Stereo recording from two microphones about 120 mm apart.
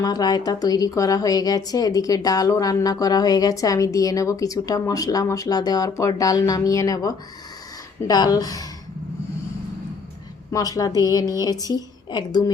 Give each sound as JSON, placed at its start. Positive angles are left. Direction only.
{"t": 0.0, "sound": "a woman's voice", "side_deg": 35}
{"t": 10.5, "sound": "a woman's voice", "side_deg": 30}